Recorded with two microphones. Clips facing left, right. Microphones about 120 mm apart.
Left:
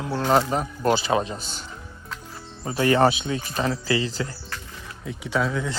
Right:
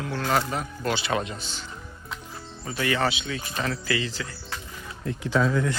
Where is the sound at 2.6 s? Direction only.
35° left (ahead or behind).